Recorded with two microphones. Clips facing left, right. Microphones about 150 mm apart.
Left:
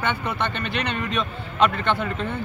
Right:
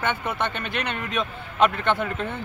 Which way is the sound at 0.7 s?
50° right (ahead or behind).